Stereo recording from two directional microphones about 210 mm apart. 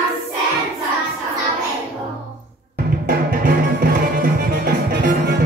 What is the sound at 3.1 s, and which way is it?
Music, 45° right (ahead or behind).